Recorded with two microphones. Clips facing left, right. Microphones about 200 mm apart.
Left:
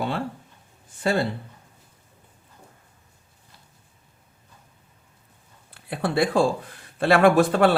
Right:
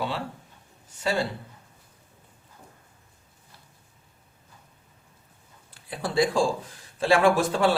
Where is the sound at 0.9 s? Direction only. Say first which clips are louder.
Left 3 dB; 55° left (ahead or behind).